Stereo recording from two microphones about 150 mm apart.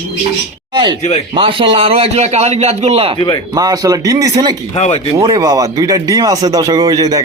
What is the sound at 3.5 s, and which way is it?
Speech, 25° right (ahead or behind).